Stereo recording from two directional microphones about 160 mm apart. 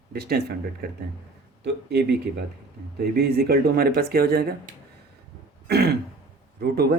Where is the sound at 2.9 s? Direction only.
75° right (ahead or behind).